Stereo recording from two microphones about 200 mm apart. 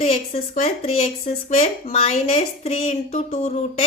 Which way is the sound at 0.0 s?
35° left (ahead or behind).